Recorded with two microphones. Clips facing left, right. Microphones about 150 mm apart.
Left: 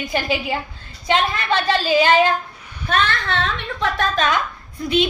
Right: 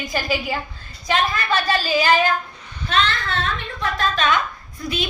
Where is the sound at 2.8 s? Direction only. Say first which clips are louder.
Left 1 dB; 55° left (ahead or behind); by 4.0 s 75° left (ahead or behind).